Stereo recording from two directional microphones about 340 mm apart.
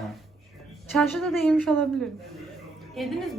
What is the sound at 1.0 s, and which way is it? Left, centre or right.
Speech, centre.